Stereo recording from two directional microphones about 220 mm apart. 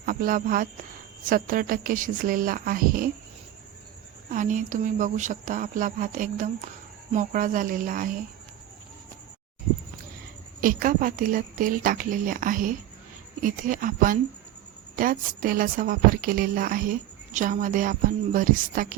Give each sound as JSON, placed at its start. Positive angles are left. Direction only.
{"t": 0.0, "sound": "a woman's voice", "side_deg": -40}
{"t": 4.3, "sound": "a woman's voice", "side_deg": -35}
{"t": 10.6, "sound": "a woman's voice", "side_deg": -40}